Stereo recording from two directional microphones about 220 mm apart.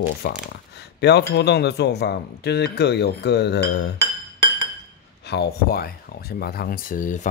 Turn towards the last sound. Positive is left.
turn(degrees=35)  # may be behind; listen again after turning